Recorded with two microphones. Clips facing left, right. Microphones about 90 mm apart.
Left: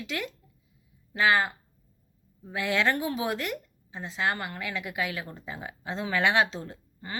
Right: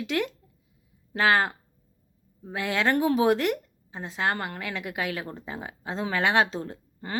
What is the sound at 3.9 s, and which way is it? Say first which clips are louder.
Speech: right 2 dB; 45° right (ahead or behind).